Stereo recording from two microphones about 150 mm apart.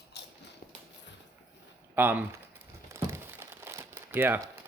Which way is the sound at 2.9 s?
15° right (ahead or behind).